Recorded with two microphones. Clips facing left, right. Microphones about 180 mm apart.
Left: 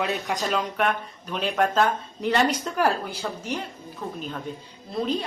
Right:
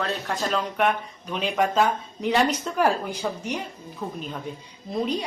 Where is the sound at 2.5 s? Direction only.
5° left (ahead or behind).